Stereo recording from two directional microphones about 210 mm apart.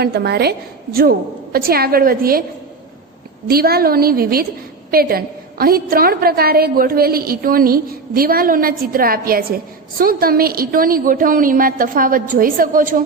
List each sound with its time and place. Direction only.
0.0 s a woman's voice: 50° right (ahead or behind)
3.4 s a woman's voice: 45° right (ahead or behind)